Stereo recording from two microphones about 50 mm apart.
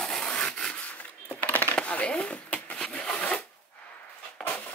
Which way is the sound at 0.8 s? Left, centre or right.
Left.